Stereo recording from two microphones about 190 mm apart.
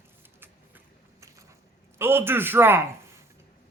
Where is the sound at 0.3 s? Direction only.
10° right (ahead or behind).